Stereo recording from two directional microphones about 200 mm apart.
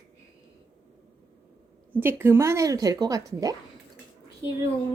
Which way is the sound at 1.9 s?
10° right (ahead or behind).